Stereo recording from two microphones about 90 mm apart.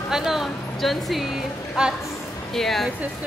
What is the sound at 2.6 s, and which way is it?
Speech, centre (ahead or behind).